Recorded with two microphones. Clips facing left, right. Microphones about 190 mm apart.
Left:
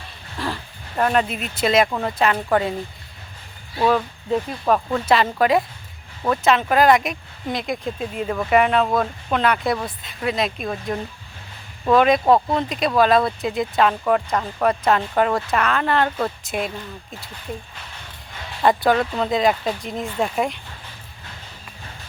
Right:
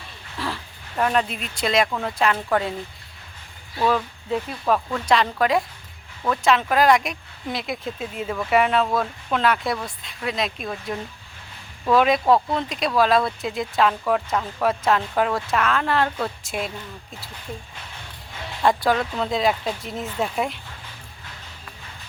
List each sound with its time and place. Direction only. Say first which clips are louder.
0.3 s a sound: left 2 dB; centre (ahead or behind)
2.0 s speech: left 2 dB; centre (ahead or behind)
3.8 s speech: left 3 dB; 5° left (ahead or behind)
11.9 s speech: left 2 dB; centre (ahead or behind)
18.6 s speech: left 3 dB; centre (ahead or behind)